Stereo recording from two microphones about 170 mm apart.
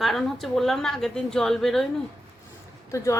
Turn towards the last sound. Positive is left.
turn(degrees=20)  # may be behind; listen again after turning